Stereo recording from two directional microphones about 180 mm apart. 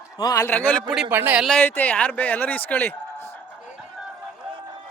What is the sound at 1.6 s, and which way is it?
A man's voice, 10° left (ahead or behind).